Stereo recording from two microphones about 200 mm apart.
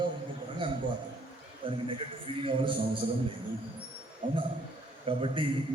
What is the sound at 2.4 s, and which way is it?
Speech, 25° right (ahead or behind).